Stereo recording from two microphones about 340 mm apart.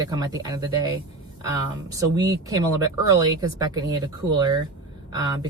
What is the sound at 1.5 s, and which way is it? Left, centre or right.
Speech, centre.